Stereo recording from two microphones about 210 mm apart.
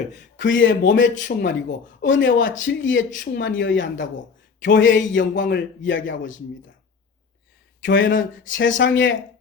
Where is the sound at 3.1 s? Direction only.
45° left (ahead or behind); by 6.3 s 65° left (ahead or behind).